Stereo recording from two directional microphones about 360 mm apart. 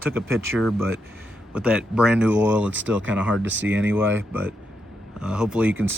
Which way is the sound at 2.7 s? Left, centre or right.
Right.